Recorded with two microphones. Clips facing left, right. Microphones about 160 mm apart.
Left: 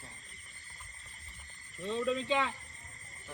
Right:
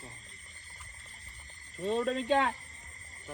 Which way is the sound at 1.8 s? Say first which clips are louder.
Right 3 dB; 65° right (ahead or behind).